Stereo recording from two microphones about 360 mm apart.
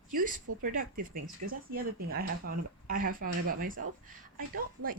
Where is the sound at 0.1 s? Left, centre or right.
Right.